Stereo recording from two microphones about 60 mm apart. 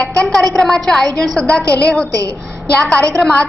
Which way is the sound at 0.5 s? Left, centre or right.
Centre.